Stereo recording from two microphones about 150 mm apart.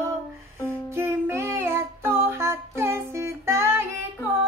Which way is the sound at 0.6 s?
15° right (ahead or behind).